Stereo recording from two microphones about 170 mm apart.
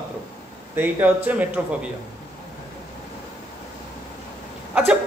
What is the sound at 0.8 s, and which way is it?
A man's voice, 10° right (ahead or behind).